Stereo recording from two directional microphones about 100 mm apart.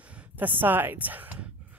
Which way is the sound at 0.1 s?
20° right (ahead or behind).